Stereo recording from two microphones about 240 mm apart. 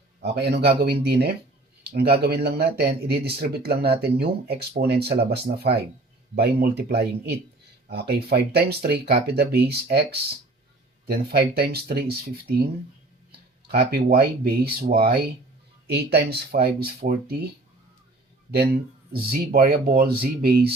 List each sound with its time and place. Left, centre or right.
0.2 s a man's voice: right
6.3 s speech: right
11.0 s speech: right
13.7 s speech: right
19.1 s speech: right